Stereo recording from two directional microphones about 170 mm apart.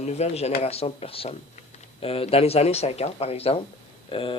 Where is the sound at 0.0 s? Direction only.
40° left (ahead or behind).